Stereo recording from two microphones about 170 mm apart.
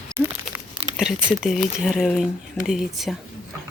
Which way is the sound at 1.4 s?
Centre (ahead or behind).